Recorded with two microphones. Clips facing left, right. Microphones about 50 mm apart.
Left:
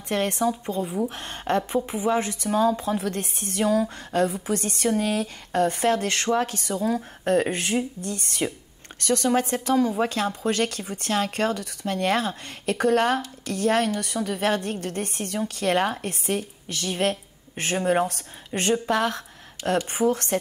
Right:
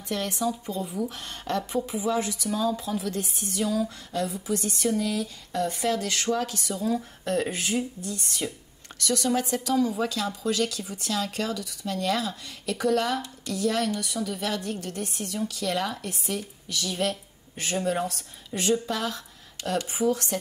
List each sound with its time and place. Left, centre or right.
0.1 s a woman's voice: left
0.9 s a woman's voice: left